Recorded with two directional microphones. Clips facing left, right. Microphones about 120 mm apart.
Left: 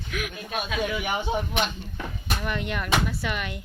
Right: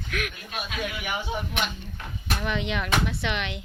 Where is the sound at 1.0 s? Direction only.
35° left (ahead or behind).